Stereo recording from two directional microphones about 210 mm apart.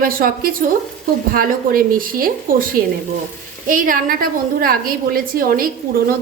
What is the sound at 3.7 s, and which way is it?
A woman's voice, 40° right (ahead or behind).